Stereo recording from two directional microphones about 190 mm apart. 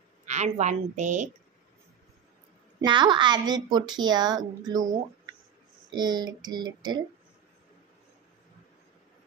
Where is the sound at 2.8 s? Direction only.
25° right (ahead or behind).